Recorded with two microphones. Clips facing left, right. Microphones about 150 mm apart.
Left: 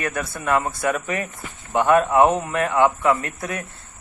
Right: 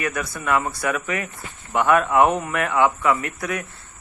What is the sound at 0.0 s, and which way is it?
A man's voice, 35° left (ahead or behind).